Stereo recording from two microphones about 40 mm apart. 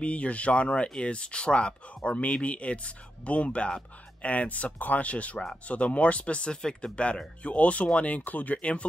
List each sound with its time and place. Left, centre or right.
0.0 s speech: left
6.5 s speech: centre
7.4 s speech: left